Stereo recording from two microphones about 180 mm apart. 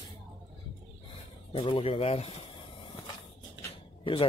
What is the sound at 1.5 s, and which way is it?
Speech, 30° left (ahead or behind).